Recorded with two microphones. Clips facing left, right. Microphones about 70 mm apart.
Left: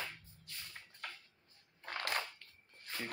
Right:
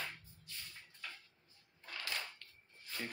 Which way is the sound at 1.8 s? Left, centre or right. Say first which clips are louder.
Left 5 dB; left.